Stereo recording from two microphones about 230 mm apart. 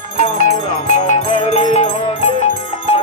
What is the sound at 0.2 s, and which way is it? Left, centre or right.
Music, left.